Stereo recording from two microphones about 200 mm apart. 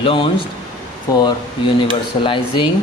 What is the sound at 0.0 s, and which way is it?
Speech, 25° left (ahead or behind).